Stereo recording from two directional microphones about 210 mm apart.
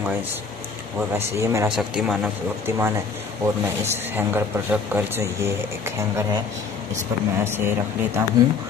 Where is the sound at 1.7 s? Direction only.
5° right (ahead or behind).